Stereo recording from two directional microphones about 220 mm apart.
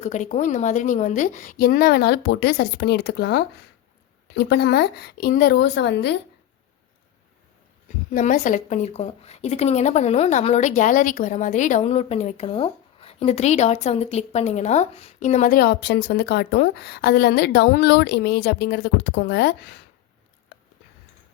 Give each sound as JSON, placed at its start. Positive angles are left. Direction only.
{"t": 0.0, "sound": "a woman's voice", "side_deg": 35}
{"t": 8.1, "sound": "a woman's voice", "side_deg": 35}